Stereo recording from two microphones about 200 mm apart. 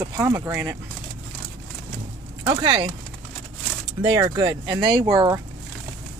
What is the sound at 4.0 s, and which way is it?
Speech, 25° right (ahead or behind).